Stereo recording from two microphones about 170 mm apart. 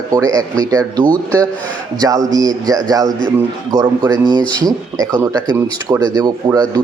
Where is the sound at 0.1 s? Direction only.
20° right (ahead or behind).